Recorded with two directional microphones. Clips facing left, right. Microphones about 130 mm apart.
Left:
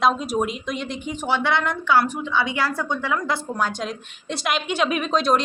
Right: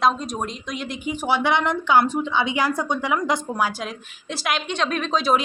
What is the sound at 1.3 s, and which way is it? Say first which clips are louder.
A woman's voice: right 1 dB; 15° right (ahead or behind).